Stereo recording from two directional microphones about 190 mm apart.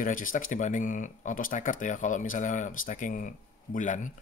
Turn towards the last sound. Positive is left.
turn(degrees=40)  # may be behind; listen again after turning